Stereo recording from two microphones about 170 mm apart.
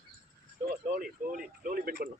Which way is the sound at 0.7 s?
55° right (ahead or behind).